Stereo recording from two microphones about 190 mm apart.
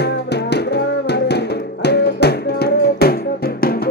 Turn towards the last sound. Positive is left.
turn(degrees=55)  # may be behind; listen again after turning